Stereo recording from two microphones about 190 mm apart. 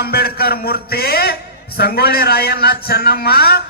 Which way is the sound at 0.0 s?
55° left (ahead or behind).